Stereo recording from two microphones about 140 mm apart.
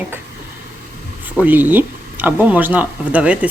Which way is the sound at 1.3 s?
10° right (ahead or behind).